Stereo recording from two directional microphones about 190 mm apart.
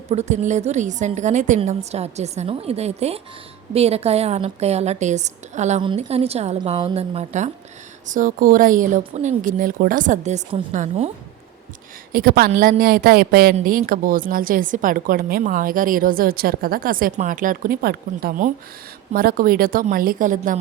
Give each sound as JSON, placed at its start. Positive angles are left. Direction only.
{"t": 0.1, "sound": "a woman's voice", "side_deg": -35}
{"t": 12.1, "sound": "a woman's voice", "side_deg": -50}